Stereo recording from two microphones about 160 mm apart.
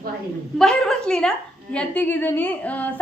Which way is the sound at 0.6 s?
5° left (ahead or behind).